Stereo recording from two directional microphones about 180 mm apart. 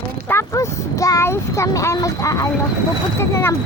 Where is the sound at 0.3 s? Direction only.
15° left (ahead or behind).